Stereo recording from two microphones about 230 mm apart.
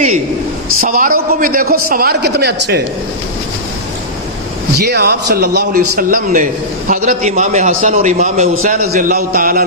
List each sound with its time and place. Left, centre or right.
0.8 s a man's voice: right
4.8 s a man's voice: right